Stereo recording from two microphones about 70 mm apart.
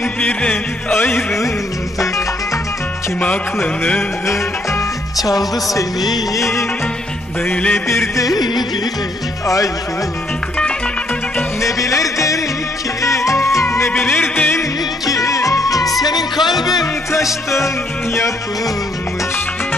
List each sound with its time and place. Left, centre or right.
0.2 s music: centre
3.2 s music: centre
5.1 s music: left
7.4 s music: centre
7.7 s music: left
8.2 s music: left
11.6 s music: left
13.7 s music: left
15.0 s music: left
16.0 s speech: left
17.1 s music: left